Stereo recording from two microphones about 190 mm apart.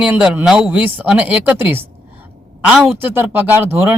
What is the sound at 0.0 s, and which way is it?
Speech, 10° right (ahead or behind).